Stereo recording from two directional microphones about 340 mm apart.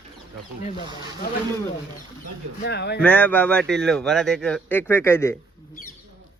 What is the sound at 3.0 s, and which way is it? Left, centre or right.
Speech, centre.